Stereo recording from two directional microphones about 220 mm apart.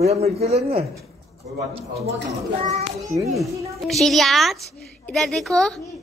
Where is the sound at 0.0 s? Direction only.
30° right (ahead or behind).